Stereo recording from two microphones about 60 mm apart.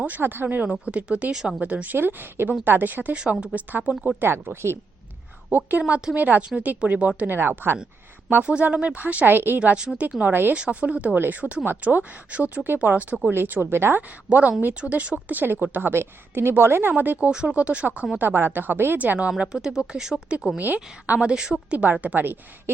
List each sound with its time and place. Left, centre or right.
0.0 s a woman's voice: right
4.2 s a woman's voice: right
5.5 s a woman's voice: right
7.3 s speech: right
8.4 s a woman's voice: centre
9.3 s speech: right
9.6 s a woman's voice: centre
13.3 s speech: right
14.3 s a woman's voice: right
17.0 s a woman's voice: right
18.2 s speech: right
19.4 s speech: centre
20.6 s a woman's voice: right